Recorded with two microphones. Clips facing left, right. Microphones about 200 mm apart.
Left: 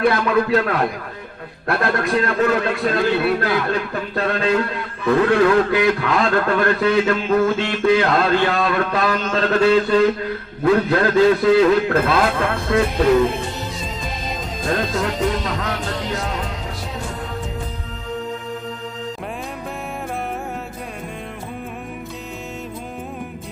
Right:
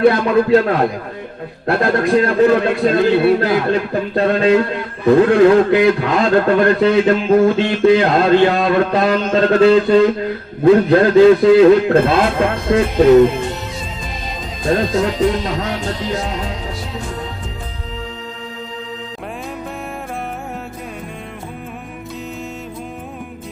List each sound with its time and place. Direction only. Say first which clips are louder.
0.0 s speech: right 5 dB; 25° right (ahead or behind)
14.7 s speech: right 6 dB; 25° right (ahead or behind)